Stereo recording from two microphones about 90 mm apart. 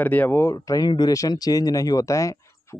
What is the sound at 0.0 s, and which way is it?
Speech, 20° left (ahead or behind).